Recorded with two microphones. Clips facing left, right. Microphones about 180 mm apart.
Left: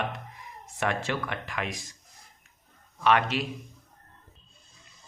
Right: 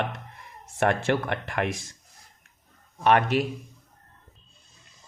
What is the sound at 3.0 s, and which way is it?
Speech, 45° right (ahead or behind).